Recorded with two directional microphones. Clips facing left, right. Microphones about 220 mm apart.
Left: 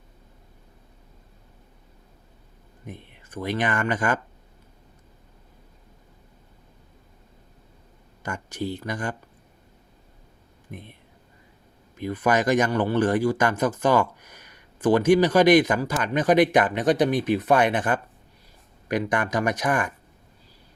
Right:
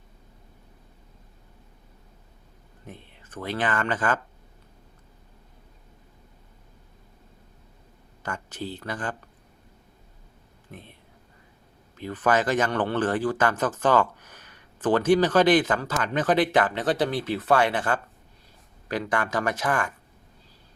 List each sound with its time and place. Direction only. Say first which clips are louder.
2.8 s speech: left 3 dB; 15° left (ahead or behind)
8.2 s speech: left 4 dB; 15° left (ahead or behind)
10.7 s speech: left 4 dB; 15° left (ahead or behind)
11.9 s a man's voice: left 1 dB; 15° left (ahead or behind)